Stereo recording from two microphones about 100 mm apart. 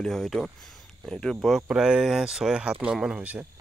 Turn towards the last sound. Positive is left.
turn(degrees=-15)  # may be behind; listen again after turning